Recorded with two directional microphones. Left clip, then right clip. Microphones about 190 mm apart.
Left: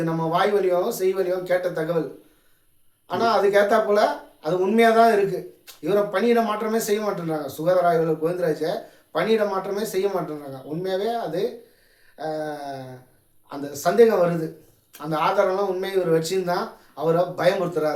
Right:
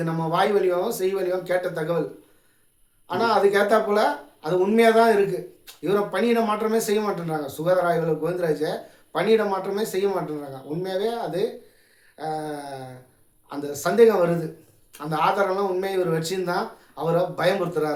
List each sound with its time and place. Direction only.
0.0 s speech: 20° right (ahead or behind)
3.1 s speech: 20° right (ahead or behind)